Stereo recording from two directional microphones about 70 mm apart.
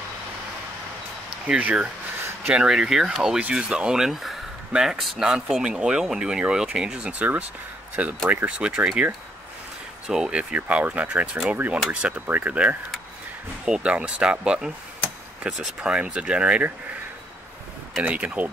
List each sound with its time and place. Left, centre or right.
1.6 s speech: right
2.5 s speech: centre
10.0 s speech: centre; by 11.8 s right
11.9 s speech: centre
18.0 s speech: centre